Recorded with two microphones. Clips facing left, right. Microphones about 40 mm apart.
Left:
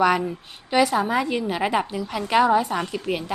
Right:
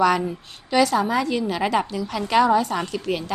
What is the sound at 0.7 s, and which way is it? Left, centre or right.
A woman's voice, centre.